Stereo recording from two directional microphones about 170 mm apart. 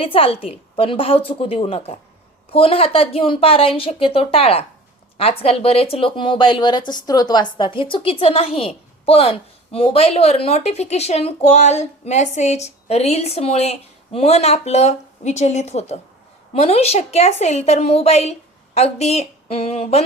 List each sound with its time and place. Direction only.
0.0 s speech: 35° left (ahead or behind)